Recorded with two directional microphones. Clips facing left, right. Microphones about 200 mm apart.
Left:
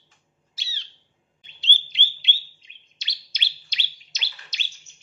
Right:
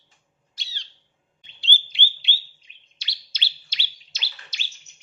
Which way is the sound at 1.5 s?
20° left (ahead or behind).